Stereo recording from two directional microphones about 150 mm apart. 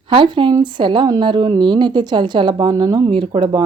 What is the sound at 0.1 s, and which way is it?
Speech, 35° right (ahead or behind).